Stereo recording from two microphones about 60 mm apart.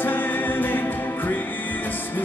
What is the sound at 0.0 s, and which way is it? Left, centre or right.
Music, left.